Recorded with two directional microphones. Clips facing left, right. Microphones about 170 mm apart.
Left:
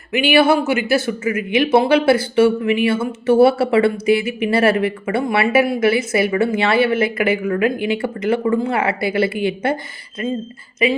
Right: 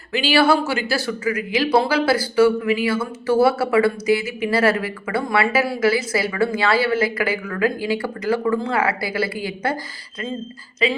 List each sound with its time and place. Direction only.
0.1 s speech: 20° left (ahead or behind)